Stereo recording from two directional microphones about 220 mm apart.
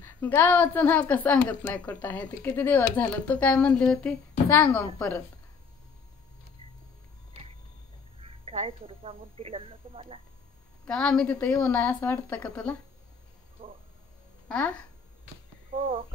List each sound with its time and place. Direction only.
0.0 s a woman's voice: 10° left (ahead or behind)
8.2 s a woman's voice: 25° right (ahead or behind)
10.9 s a woman's voice: 5° left (ahead or behind)
13.6 s a sound: 25° right (ahead or behind)
14.5 s a woman's voice: 5° left (ahead or behind)
15.7 s speech: 25° right (ahead or behind)